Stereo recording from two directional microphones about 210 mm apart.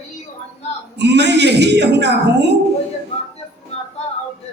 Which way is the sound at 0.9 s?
55° right (ahead or behind).